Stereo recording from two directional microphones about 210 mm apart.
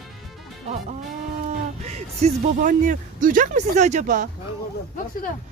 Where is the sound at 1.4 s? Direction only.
30° right (ahead or behind).